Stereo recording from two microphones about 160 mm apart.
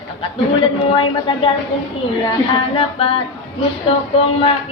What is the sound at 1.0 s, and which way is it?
Music, 30° left (ahead or behind).